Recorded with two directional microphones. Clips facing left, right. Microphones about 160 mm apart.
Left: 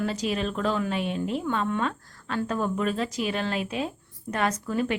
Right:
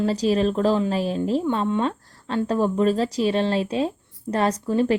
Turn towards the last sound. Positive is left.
turn(degrees=-30)  # may be behind; listen again after turning